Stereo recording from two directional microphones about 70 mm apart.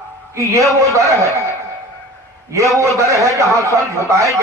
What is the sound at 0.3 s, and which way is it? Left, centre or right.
Speech, right.